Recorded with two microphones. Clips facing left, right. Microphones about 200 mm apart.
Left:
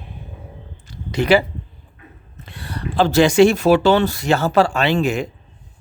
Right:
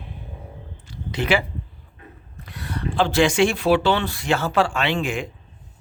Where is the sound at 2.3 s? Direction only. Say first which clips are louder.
Even; 25° left (ahead or behind).